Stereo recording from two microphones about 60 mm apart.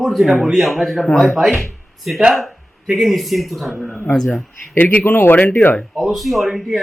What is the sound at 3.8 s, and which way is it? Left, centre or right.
Speech, centre.